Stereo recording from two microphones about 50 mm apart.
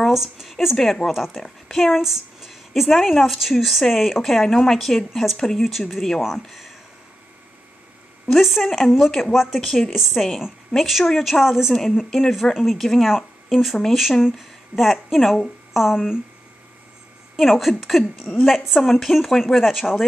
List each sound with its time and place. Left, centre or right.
0.0 s speech: centre
0.7 s a woman's voice: centre
8.4 s a woman's voice: centre
8.6 s a woman's voice: centre
9.2 s a woman's voice: centre
17.4 s a woman's voice: centre